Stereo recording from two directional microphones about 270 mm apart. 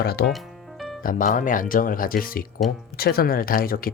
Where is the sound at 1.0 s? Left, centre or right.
Left.